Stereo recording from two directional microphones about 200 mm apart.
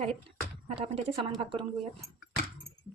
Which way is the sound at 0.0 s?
30° right (ahead or behind).